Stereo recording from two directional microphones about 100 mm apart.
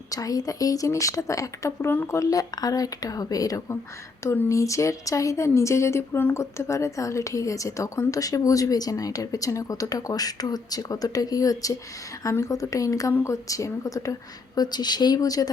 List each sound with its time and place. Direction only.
0.1 s a woman's voice: 35° left (ahead or behind)
1.9 s speech: 20° left (ahead or behind)
2.1 s a woman's voice: 35° left (ahead or behind)